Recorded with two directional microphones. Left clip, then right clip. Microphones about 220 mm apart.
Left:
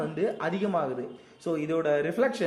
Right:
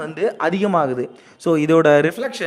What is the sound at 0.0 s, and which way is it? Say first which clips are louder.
A man's voice: right 9 dB; 45° right (ahead or behind).